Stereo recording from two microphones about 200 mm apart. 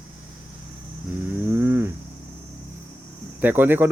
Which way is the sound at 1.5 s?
10° right (ahead or behind).